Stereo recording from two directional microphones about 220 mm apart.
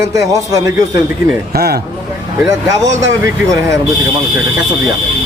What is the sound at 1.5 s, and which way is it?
Speech, 45° right (ahead or behind).